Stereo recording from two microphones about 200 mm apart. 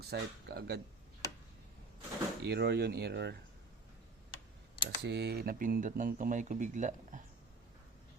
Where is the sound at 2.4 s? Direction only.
55° right (ahead or behind).